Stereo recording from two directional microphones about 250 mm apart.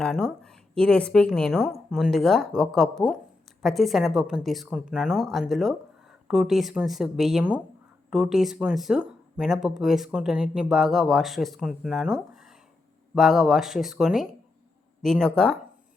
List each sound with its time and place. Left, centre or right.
0.0 s speech: centre